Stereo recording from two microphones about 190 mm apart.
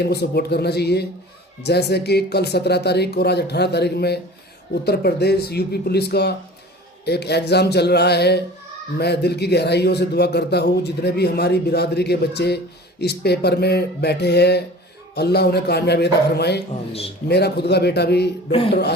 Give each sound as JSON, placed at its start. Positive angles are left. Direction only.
{"t": 0.0, "sound": "a man's voice", "side_deg": 60}